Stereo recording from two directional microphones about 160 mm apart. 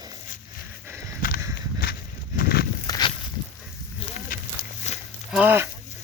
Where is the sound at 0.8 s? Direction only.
15° right (ahead or behind).